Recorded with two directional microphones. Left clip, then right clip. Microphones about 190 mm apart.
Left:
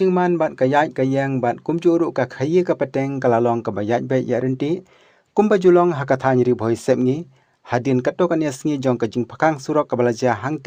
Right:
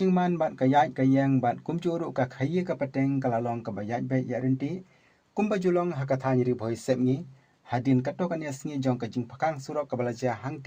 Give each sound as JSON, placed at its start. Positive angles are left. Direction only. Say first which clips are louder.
{"t": 0.0, "sound": "speech", "louder": "left 9 dB", "side_deg": 20}